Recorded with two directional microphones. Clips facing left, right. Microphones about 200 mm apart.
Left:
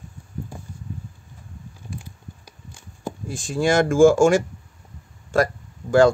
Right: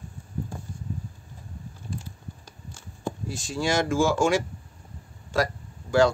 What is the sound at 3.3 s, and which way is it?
Speech, 50° left (ahead or behind).